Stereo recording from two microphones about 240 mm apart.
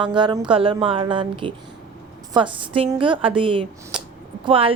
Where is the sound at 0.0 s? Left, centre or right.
Centre.